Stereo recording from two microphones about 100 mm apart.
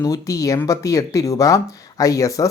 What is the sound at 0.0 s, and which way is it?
Speech, 35° left (ahead or behind).